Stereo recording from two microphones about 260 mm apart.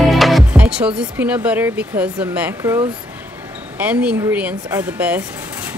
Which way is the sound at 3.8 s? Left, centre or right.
Centre.